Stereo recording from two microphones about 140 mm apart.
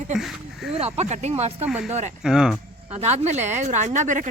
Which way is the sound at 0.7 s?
45° right (ahead or behind).